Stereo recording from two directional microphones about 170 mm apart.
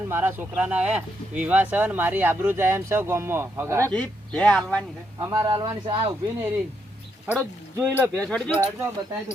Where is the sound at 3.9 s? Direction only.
5° left (ahead or behind).